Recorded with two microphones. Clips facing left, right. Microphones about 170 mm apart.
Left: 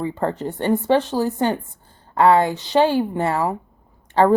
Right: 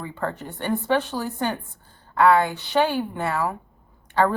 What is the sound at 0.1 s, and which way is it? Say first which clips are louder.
Speech: left 6 dB; 35° left (ahead or behind).